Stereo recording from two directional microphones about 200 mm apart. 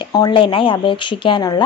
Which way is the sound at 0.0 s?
20° left (ahead or behind).